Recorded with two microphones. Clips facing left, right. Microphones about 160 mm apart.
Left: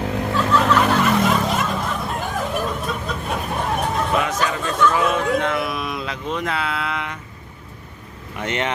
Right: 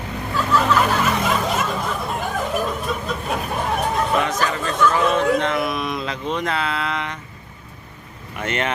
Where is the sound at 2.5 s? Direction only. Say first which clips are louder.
Right 1 dB; centre (ahead or behind).